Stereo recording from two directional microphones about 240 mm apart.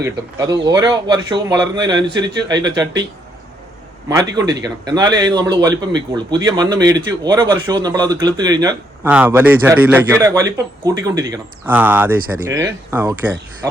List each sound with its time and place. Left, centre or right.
0.0 s a man's voice: centre
4.1 s a man's voice: centre